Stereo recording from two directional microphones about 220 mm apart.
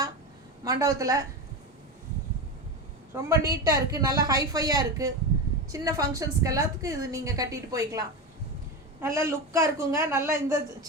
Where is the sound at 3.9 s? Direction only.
15° right (ahead or behind).